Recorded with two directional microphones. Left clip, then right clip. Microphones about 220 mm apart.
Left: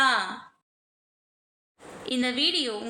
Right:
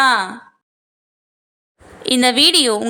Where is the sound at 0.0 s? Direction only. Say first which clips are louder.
Right 9 dB; 35° right (ahead or behind).